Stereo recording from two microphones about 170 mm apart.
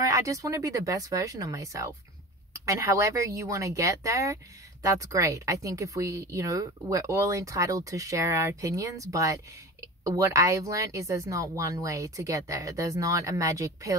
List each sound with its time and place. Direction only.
0.0 s speech: 20° right (ahead or behind)